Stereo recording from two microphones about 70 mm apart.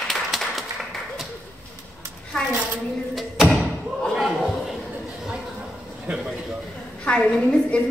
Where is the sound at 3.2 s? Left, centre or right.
Centre.